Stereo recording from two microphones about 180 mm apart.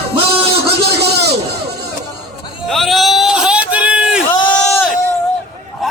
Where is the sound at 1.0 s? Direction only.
65° right (ahead or behind).